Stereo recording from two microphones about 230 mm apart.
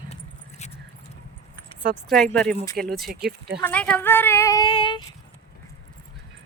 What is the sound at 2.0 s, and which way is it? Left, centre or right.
Speech, centre.